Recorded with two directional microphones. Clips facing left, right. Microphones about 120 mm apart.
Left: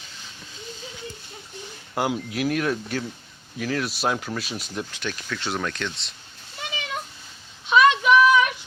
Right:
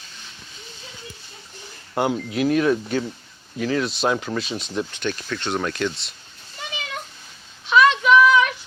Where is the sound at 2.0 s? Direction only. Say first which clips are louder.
Right 3 dB; 5° left (ahead or behind).